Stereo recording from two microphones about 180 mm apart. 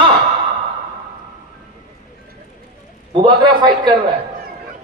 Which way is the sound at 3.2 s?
25° right (ahead or behind).